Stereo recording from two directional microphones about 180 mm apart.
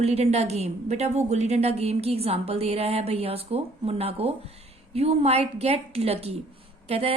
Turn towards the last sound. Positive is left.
turn(degrees=-35)  # may be behind; listen again after turning